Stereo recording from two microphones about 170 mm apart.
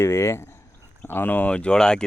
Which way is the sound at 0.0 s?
15° left (ahead or behind).